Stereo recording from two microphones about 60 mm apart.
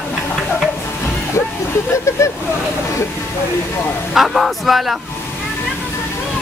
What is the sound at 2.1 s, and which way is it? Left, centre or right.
Speech, left.